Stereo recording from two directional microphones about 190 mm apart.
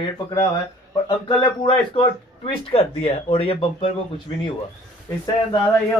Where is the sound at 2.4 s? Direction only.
30° left (ahead or behind).